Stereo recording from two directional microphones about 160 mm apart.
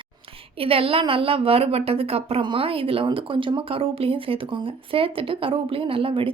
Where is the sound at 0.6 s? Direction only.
35° right (ahead or behind).